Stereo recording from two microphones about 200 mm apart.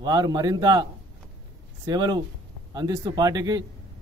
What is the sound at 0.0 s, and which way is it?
Speech, 20° right (ahead or behind).